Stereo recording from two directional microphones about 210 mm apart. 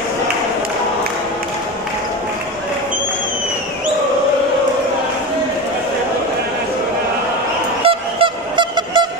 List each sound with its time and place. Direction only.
7.8 s honk: 25° right (ahead or behind)